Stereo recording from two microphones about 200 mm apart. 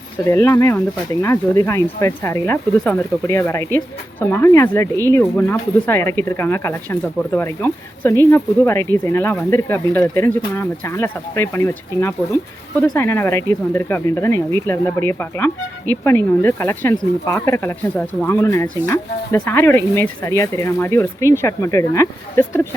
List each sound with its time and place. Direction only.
0.3 s speech: 15° left (ahead or behind)